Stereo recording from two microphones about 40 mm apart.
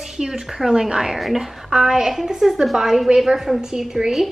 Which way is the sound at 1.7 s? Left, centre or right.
Centre.